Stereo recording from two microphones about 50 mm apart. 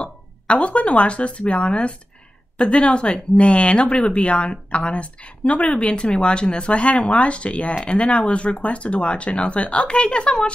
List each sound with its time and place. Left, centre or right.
0.0 s speech: left